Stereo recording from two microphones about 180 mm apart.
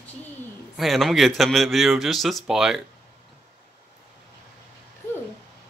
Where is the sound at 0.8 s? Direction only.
Centre (ahead or behind).